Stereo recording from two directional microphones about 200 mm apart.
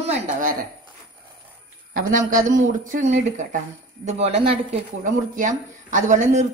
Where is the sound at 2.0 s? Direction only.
40° right (ahead or behind).